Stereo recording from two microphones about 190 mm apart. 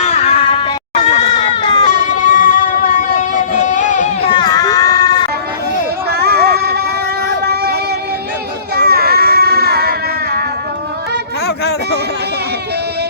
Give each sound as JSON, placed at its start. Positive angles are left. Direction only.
{"t": 0.0, "sound": "a sound", "side_deg": 35}
{"t": 1.3, "sound": "run", "side_deg": 25}
{"t": 1.9, "sound": "music", "side_deg": 45}
{"t": 4.4, "sound": "run", "side_deg": 20}
{"t": 6.1, "sound": "a sound", "side_deg": -60}
{"t": 7.4, "sound": "child singing", "side_deg": -60}
{"t": 8.7, "sound": "baby cry", "side_deg": -55}